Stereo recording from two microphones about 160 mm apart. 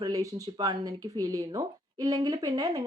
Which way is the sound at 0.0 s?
20° right (ahead or behind).